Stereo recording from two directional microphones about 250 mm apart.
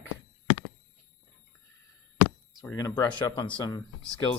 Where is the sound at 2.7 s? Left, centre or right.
Centre.